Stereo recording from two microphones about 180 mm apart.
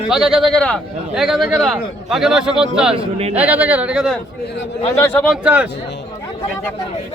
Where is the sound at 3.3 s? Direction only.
10° right (ahead or behind).